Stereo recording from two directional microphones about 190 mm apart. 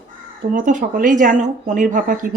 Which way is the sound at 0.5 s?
45° right (ahead or behind).